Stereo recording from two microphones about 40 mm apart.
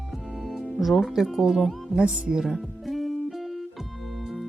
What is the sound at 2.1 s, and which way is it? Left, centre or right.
Speech, right.